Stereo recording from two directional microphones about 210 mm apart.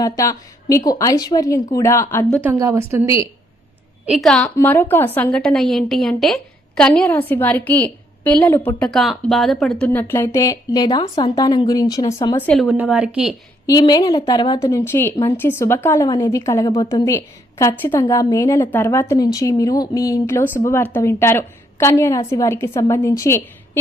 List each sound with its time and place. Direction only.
0.0 s a woman's voice: 15° left (ahead or behind)
2.4 s a woman's voice: 15° right (ahead or behind)
4.0 s speech: centre (ahead or behind)
4.4 s a woman's voice: 10° left (ahead or behind)
12.5 s speech: centre (ahead or behind)
13.7 s a woman's voice: 20° left (ahead or behind)